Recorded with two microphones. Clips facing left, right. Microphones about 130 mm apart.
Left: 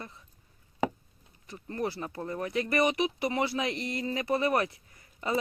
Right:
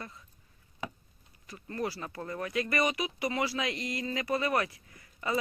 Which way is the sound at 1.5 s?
20° left (ahead or behind).